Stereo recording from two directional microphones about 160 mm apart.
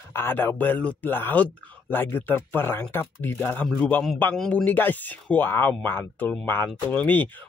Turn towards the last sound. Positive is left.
turn(degrees=10)  # may be behind; listen again after turning